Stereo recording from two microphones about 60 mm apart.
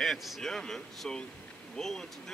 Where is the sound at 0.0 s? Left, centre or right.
Centre.